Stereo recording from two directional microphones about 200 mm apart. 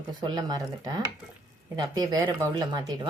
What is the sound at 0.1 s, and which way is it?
Speech, 20° right (ahead or behind).